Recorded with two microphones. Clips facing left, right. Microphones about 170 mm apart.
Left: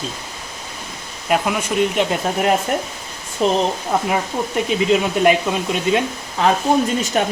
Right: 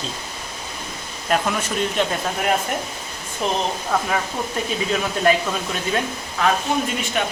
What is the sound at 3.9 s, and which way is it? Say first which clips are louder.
Speech: left 3 dB; 20° left (ahead or behind).